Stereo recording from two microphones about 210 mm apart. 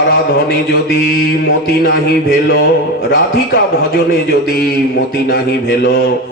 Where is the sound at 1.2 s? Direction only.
55° left (ahead or behind).